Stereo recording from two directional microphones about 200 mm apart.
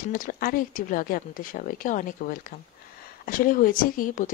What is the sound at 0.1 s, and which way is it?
Speech, 45° left (ahead or behind).